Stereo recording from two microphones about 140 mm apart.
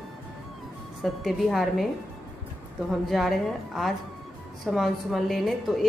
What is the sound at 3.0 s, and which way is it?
A woman's voice, centre (ahead or behind).